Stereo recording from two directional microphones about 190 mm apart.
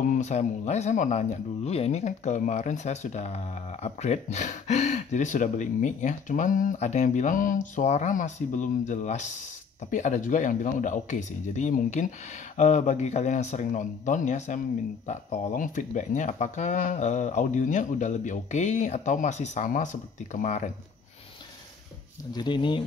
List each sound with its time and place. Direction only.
0.0 s speech: 40° left (ahead or behind)
22.3 s speech: 25° left (ahead or behind)